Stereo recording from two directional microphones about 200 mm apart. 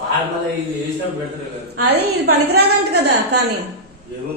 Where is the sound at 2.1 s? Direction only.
55° right (ahead or behind).